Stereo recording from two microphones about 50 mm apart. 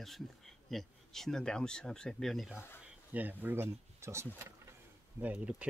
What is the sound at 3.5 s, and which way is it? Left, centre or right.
Speech, right.